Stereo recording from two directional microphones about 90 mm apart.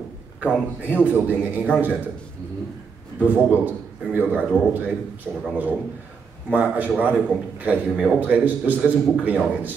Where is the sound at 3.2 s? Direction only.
20° right (ahead or behind).